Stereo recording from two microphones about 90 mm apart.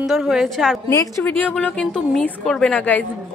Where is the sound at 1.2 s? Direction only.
20° left (ahead or behind).